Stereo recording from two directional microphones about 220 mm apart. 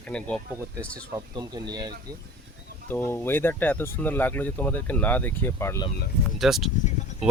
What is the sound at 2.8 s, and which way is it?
Speech, 10° left (ahead or behind).